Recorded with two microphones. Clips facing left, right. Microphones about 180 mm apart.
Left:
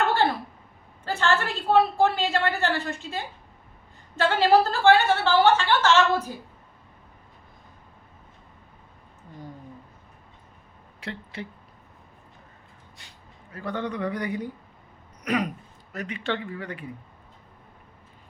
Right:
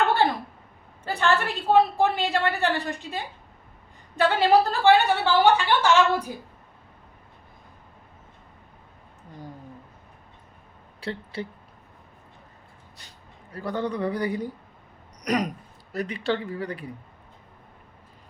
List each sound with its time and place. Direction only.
1.1 s a woman's voice: 15° right (ahead or behind)
4.2 s a woman's voice: 15° right (ahead or behind)
11.0 s speech: 30° right (ahead or behind)
13.5 s a man's voice: 35° right (ahead or behind)
15.2 s a sound: 40° right (ahead or behind)
15.9 s a man's voice: 35° right (ahead or behind)